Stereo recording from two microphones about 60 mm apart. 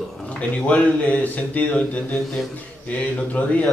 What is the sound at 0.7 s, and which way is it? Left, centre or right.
A man's voice, left.